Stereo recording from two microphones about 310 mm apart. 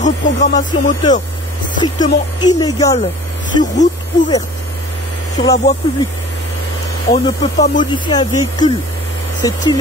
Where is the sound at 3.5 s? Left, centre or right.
Left.